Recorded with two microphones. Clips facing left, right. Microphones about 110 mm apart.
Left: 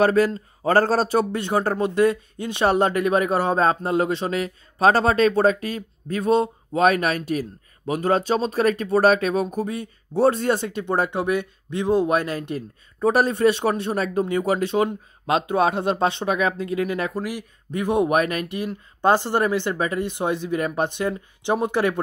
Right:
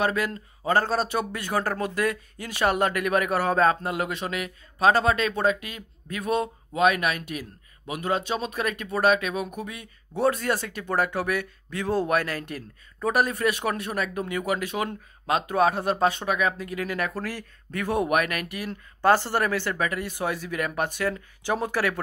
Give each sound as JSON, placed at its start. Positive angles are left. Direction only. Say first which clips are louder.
{"t": 0.0, "sound": "a man's voice", "louder": "left 8 dB", "side_deg": 35}